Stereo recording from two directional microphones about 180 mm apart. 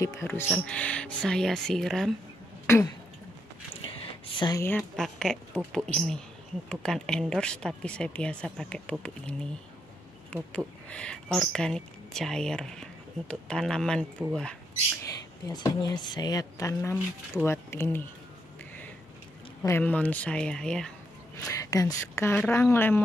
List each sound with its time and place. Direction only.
0.3 s speech: 5° left (ahead or behind)
2.6 s a sound: 15° left (ahead or behind)
3.8 s a sound: 30° left (ahead or behind)
4.6 s speech: 10° left (ahead or behind)
15.4 s speech: 20° left (ahead or behind)
19.6 s speech: 10° left (ahead or behind)
21.5 s speech: 20° left (ahead or behind)